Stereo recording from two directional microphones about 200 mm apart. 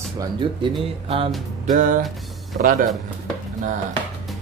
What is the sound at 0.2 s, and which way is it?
Speech, 25° right (ahead or behind).